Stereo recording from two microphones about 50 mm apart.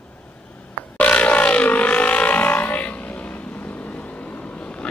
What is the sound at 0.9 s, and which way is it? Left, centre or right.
Vehicle, left.